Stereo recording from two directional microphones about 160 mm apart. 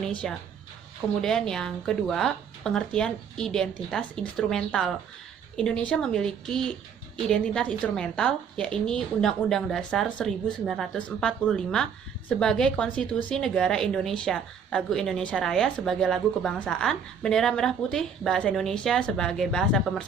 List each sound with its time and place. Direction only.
0.0 s a woman's voice: 5° left (ahead or behind)